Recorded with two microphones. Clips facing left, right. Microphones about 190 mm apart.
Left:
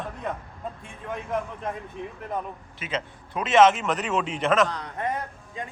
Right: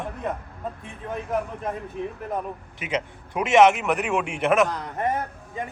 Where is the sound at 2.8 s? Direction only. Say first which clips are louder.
Right 3 dB; 15° right (ahead or behind).